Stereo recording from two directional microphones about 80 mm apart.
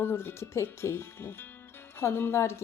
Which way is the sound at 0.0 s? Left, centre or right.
Left.